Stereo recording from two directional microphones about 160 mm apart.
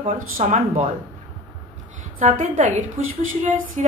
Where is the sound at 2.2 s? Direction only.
50° right (ahead or behind).